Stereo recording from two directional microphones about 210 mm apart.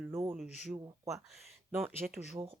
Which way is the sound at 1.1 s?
Centre (ahead or behind).